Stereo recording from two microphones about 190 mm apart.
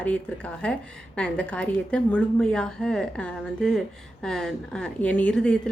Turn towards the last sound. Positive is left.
turn(degrees=5)  # may be behind; listen again after turning